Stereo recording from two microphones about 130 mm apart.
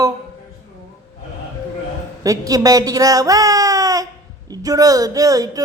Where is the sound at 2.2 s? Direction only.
25° right (ahead or behind).